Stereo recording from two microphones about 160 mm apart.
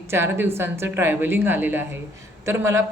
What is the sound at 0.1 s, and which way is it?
Speech, 15° right (ahead or behind).